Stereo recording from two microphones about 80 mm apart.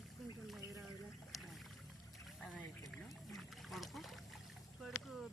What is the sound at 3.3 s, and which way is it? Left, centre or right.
Boat, centre.